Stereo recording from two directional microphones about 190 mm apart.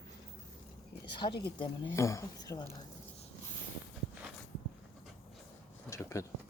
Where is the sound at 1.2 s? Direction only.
30° left (ahead or behind).